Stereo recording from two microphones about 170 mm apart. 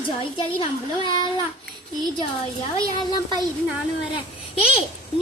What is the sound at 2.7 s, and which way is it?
Speech, 25° left (ahead or behind).